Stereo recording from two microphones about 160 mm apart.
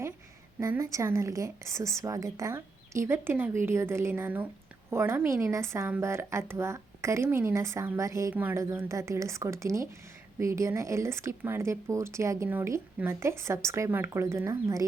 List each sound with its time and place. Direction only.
0.6 s speech: 20° right (ahead or behind)